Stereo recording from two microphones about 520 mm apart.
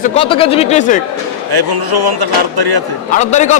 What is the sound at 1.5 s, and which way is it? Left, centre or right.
Speech, right.